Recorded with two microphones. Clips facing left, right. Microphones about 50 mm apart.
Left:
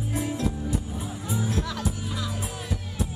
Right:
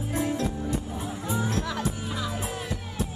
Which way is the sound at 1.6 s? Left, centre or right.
Centre.